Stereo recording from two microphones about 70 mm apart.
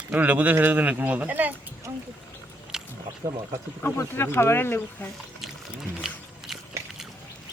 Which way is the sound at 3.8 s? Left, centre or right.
Left.